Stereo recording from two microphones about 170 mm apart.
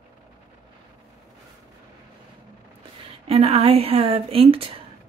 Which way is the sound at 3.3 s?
35° right (ahead or behind).